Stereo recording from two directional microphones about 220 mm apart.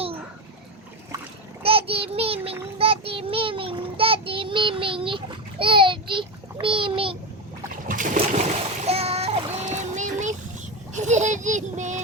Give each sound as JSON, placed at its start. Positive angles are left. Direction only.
{"t": 1.6, "sound": "child singing", "side_deg": -25}
{"t": 7.9, "sound": "splash", "side_deg": -35}
{"t": 10.9, "sound": "a sound", "side_deg": -35}